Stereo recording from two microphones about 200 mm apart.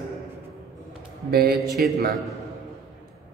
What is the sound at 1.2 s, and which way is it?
Speech, 50° right (ahead or behind).